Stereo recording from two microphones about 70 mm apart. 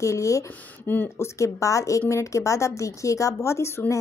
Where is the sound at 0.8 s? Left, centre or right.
Left.